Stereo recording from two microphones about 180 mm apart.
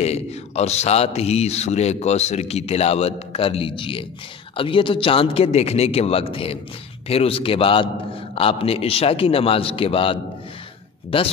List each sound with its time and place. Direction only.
0.0 s speech: 35° left (ahead or behind)